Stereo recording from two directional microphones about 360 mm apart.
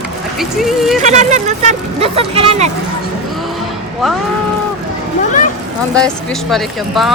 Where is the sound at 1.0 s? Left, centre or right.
Centre.